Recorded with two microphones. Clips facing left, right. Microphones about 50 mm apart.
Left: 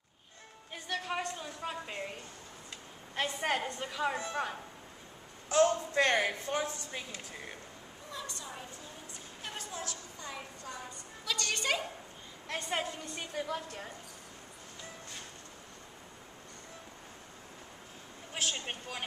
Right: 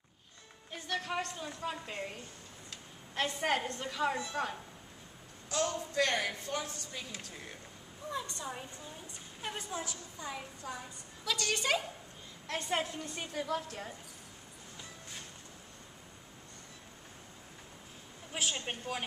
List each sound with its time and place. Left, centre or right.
0.7 s a sound: centre
2.7 s a woman's voice: centre
5.5 s a woman's voice: left
8.1 s a woman's voice: right; by 13.9 s centre
18.3 s a woman's voice: centre